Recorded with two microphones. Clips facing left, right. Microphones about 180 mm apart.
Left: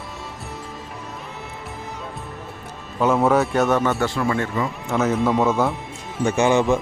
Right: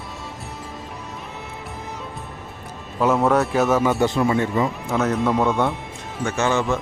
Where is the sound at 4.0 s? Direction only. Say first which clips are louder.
Right 3 dB; 20° right (ahead or behind).